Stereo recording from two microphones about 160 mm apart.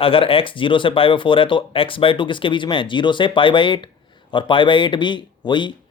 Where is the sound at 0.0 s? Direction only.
35° left (ahead or behind).